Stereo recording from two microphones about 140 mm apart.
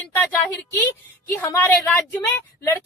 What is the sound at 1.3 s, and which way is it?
A woman's voice, 15° left (ahead or behind).